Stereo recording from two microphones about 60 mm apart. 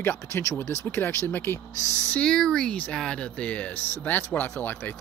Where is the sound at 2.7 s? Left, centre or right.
Left.